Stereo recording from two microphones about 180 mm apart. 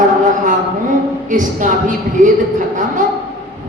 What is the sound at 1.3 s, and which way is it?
Speech, 45° right (ahead or behind).